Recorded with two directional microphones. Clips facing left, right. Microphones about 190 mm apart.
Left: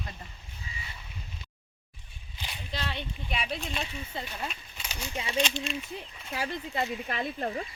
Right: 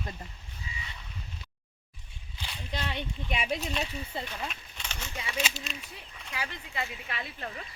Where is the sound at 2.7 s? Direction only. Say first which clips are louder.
Right 1 dB; 15° right (ahead or behind).